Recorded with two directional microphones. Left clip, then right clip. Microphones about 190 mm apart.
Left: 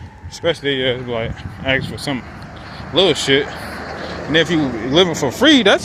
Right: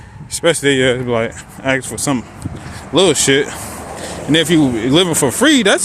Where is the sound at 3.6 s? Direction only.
Centre (ahead or behind).